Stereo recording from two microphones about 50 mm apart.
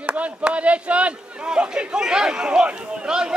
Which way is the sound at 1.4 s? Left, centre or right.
Centre.